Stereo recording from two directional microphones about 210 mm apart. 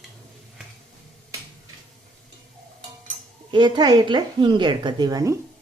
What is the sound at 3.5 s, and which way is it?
A woman's voice, 20° right (ahead or behind).